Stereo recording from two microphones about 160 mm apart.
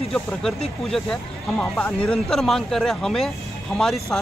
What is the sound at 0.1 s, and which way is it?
Speech, centre (ahead or behind).